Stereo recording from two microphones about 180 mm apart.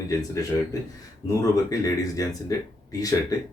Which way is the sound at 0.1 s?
20° left (ahead or behind).